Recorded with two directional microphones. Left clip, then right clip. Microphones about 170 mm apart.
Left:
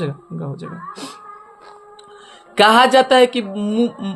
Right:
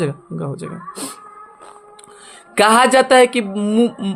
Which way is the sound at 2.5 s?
35° right (ahead or behind).